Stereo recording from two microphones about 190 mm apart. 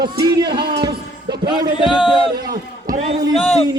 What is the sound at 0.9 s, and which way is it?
Speech, 55° right (ahead or behind).